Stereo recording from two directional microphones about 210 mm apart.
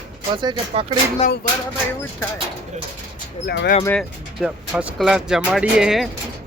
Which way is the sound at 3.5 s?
50° left (ahead or behind).